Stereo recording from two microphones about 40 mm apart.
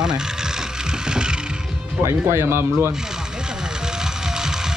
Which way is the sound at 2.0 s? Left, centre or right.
Right.